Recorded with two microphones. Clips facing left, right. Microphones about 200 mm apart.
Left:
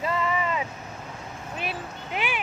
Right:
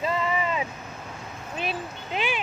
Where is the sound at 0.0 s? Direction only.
20° right (ahead or behind).